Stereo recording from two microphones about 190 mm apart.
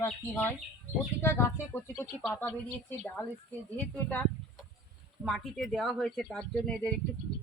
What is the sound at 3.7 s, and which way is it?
Speech, 5° left (ahead or behind).